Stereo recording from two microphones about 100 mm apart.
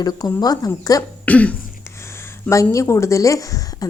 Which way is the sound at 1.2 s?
15° left (ahead or behind).